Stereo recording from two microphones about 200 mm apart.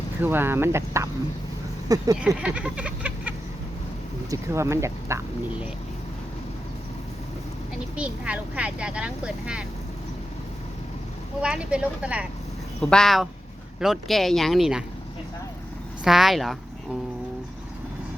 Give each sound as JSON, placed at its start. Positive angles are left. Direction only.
{"t": 0.2, "sound": "speech", "side_deg": -10}
{"t": 2.2, "sound": "a sound", "side_deg": -5}
{"t": 4.3, "sound": "speech", "side_deg": -15}
{"t": 7.9, "sound": "speech", "side_deg": -5}
{"t": 11.3, "sound": "speech", "side_deg": -5}
{"t": 16.0, "sound": "speech", "side_deg": 0}